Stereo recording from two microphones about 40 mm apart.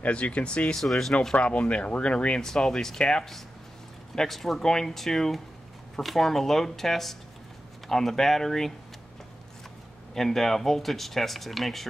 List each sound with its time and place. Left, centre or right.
0.0 s speech: left
0.7 s speech: centre
1.3 s speech: left
4.1 s speech: centre
10.1 s speech: centre